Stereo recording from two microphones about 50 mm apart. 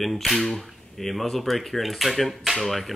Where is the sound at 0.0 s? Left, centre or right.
Centre.